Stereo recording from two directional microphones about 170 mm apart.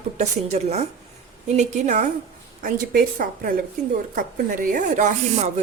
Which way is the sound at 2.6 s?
55° right (ahead or behind).